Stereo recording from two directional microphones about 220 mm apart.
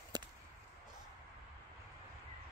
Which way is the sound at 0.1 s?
20° right (ahead or behind).